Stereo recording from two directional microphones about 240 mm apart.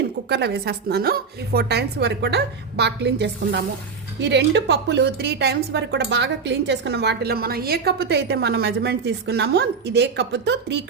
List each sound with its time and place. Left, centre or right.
0.3 s a woman's voice: right